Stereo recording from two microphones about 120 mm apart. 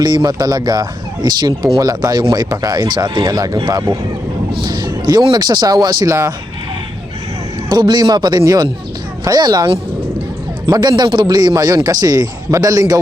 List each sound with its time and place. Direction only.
0.0 s a man's voice: 35° right (ahead or behind)
4.6 s a sound: 35° right (ahead or behind)
5.3 s a man's voice: 35° right (ahead or behind)
7.7 s a man's voice: 35° right (ahead or behind)